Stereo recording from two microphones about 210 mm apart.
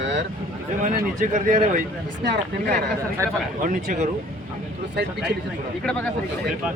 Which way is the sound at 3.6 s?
40° right (ahead or behind).